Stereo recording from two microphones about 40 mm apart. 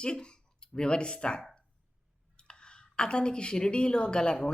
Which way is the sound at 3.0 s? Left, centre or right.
Left.